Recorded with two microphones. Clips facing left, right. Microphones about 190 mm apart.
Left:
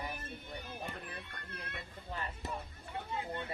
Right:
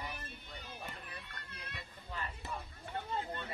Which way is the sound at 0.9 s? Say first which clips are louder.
Left 4 dB; 55° left (ahead or behind).